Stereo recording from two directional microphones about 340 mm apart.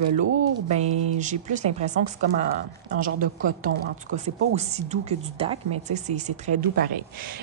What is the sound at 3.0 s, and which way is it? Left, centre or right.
A woman's voice, right.